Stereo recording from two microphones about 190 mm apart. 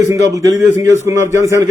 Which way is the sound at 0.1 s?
15° right (ahead or behind).